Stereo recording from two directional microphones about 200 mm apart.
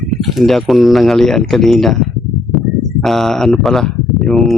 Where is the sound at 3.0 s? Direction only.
Centre (ahead or behind).